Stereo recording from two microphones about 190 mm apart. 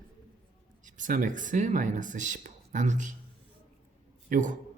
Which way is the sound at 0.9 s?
45° right (ahead or behind).